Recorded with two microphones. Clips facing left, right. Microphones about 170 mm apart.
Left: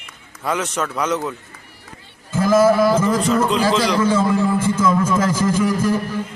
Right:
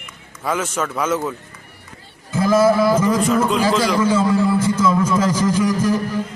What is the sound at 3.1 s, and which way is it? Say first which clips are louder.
Music: even; centre (ahead or behind).